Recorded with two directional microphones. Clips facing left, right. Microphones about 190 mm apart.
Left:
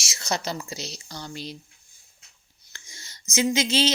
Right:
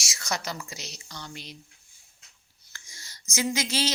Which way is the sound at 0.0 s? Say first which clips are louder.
Left 4 dB; 25° left (ahead or behind).